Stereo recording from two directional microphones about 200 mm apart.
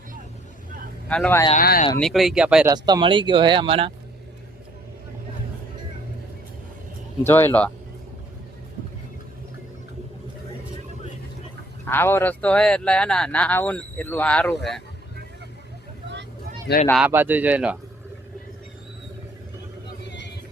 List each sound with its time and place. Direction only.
1.0 s speech: 5° left (ahead or behind)
1.5 s speech: 45° left (ahead or behind)
2.0 s speech: centre (ahead or behind)
2.6 s speech: 20° right (ahead or behind)
7.3 s speech: 10° left (ahead or behind)
11.9 s speech: 10° left (ahead or behind)
16.7 s speech: 55° left (ahead or behind)
17.1 s speech: 10° right (ahead or behind)